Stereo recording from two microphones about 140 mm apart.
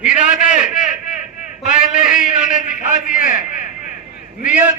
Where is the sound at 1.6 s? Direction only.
65° left (ahead or behind).